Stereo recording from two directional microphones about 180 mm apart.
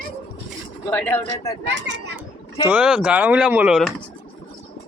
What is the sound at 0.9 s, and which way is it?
Speech, 10° left (ahead or behind).